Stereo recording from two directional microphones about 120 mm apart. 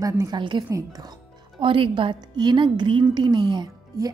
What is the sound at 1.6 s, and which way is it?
A woman's voice, 45° right (ahead or behind).